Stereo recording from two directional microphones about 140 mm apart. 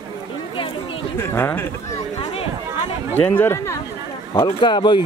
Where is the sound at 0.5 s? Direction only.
40° left (ahead or behind).